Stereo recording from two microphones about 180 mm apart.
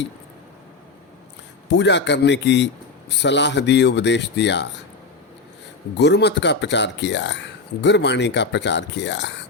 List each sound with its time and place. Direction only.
1.7 s speech: 75° left (ahead or behind)
6.0 s speech: 70° left (ahead or behind)